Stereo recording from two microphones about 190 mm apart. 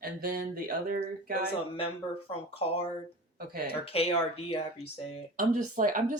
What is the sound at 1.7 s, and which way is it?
Speech, 30° left (ahead or behind).